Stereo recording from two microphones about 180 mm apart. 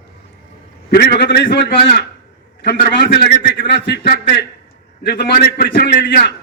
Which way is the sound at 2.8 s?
65° left (ahead or behind).